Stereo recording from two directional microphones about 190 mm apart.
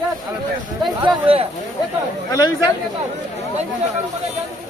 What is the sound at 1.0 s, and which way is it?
Speech, 30° right (ahead or behind).